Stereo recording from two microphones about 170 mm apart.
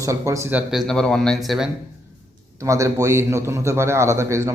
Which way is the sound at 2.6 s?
20° right (ahead or behind).